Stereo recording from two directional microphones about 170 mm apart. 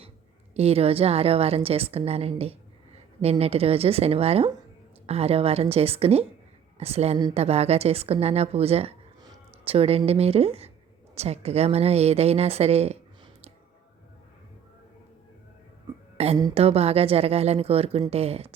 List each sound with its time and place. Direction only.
0.5 s a woman's voice: 35° right (ahead or behind)
16.1 s a woman's voice: 35° right (ahead or behind)